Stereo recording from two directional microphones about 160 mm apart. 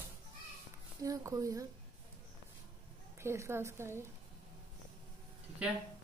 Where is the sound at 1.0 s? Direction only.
20° right (ahead or behind).